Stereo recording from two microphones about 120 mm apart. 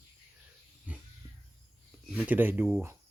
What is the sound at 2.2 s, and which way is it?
Speech, 15° right (ahead or behind).